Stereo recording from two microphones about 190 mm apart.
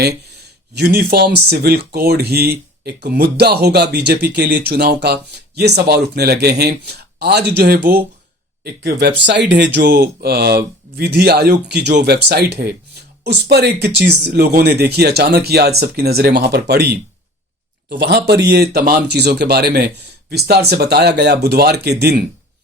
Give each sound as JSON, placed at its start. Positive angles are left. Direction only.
{"t": 0.7, "sound": "speech", "side_deg": -60}